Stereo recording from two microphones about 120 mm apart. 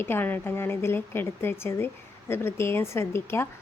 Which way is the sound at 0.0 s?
15° left (ahead or behind).